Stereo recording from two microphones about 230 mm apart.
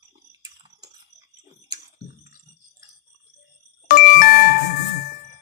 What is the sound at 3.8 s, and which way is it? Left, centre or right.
Music, left.